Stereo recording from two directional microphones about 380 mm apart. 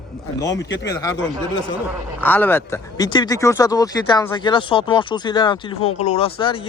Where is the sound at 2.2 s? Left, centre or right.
Centre.